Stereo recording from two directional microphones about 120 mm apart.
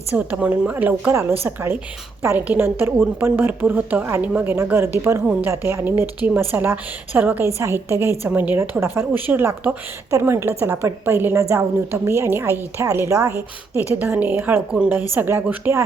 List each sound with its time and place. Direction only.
0.2 s a woman's voice: 10° right (ahead or behind)
5.5 s a woman's voice: 20° right (ahead or behind)